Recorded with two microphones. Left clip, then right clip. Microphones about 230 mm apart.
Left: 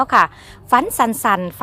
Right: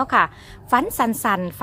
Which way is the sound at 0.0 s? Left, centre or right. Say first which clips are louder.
Left 4 dB; left.